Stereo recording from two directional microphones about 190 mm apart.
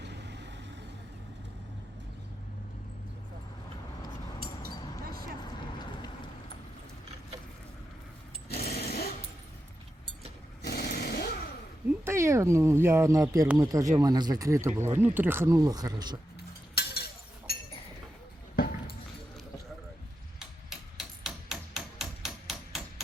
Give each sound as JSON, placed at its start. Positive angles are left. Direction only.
{"t": 0.0, "sound": "vehicle", "side_deg": -65}
{"t": 5.4, "sound": "vehicle", "side_deg": 20}
{"t": 8.4, "sound": "sewing machine", "side_deg": 55}
{"t": 10.6, "sound": "chainsaw", "side_deg": 55}
{"t": 12.0, "sound": "speech", "side_deg": -15}
{"t": 16.7, "sound": "chink", "side_deg": 55}
{"t": 20.4, "sound": "music", "side_deg": 0}